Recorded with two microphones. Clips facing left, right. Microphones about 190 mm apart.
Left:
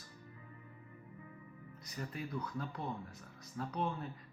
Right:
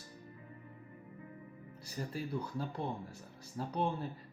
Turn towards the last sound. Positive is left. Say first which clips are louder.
# right 3 dB
turn(degrees=-30)  # may be behind; listen again after turning